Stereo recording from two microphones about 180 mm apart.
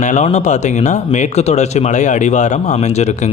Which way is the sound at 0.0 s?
40° left (ahead or behind).